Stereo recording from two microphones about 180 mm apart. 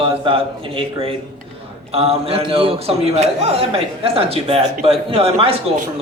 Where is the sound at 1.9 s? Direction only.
35° right (ahead or behind).